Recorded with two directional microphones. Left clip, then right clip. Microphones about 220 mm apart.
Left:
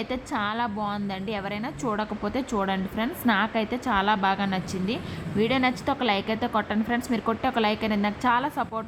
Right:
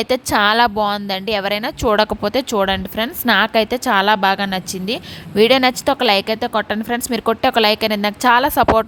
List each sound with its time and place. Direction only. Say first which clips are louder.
0.0 s a woman's voice: right 13 dB; 50° right (ahead or behind)